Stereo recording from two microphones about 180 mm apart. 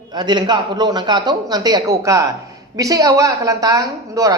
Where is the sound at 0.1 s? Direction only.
25° right (ahead or behind).